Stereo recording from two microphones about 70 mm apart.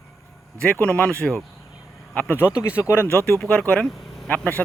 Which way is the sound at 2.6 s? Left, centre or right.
Left.